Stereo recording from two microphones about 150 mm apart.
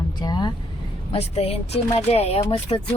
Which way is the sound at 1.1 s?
40° left (ahead or behind).